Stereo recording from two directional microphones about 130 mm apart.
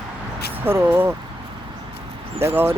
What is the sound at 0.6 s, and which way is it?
Speech, 15° right (ahead or behind).